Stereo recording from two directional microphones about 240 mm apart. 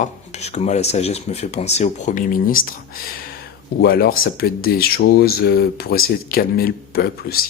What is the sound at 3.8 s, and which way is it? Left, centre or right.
Speech, left.